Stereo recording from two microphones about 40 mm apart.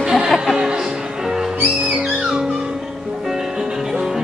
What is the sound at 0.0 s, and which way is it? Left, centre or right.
Music, centre.